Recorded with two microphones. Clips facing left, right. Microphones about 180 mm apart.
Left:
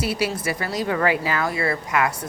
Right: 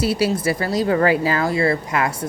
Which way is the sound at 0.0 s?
35° right (ahead or behind).